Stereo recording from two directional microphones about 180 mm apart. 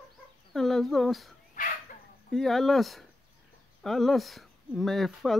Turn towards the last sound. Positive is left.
turn(degrees=0)  # may be behind; listen again after turning